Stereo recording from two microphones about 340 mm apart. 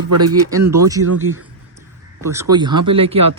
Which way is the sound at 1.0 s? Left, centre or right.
Right.